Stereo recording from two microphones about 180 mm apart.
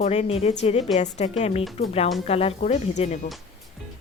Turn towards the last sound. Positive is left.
turn(degrees=40)  # may be behind; listen again after turning